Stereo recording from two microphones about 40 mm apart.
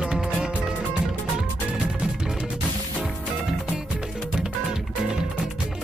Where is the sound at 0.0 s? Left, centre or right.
Right.